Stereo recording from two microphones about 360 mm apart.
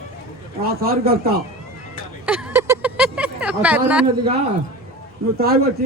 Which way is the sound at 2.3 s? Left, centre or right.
Centre.